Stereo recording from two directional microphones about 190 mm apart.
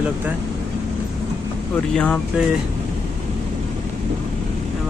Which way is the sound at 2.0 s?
5° left (ahead or behind).